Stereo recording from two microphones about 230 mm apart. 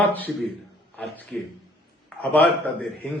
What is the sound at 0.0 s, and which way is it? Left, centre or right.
A man's voice, centre.